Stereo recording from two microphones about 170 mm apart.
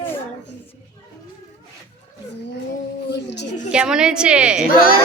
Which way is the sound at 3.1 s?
90° left.